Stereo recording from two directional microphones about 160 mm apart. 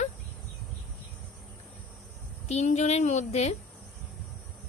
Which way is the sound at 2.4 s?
45° left (ahead or behind).